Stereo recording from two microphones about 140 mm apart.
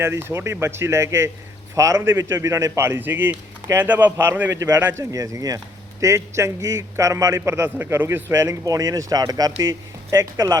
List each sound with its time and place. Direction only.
0.0 s a man's voice: 15° right (ahead or behind)